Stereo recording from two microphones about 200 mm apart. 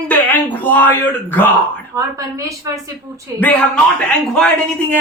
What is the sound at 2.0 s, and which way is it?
Speech, 15° right (ahead or behind).